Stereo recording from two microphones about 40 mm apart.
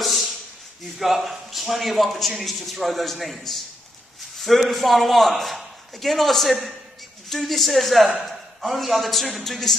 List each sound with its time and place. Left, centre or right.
0.0 s a sound: centre
0.9 s a man's voice: centre
4.6 s a man's voice: centre